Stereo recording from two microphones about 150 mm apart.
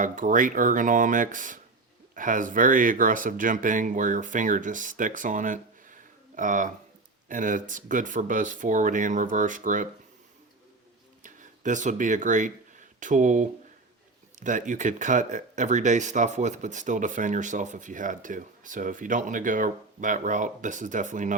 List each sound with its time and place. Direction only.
0.0 s speech: 60° right (ahead or behind)
11.2 s speech: 60° right (ahead or behind)